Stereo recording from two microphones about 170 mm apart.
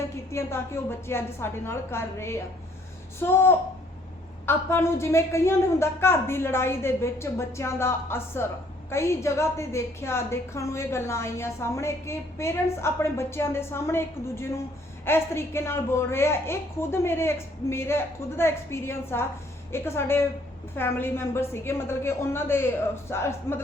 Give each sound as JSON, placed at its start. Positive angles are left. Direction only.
{"t": 0.3, "sound": "a woman's voice", "side_deg": 15}